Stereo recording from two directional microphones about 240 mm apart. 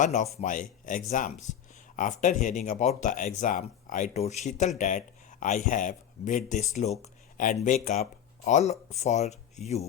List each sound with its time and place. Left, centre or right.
0.0 s speech: left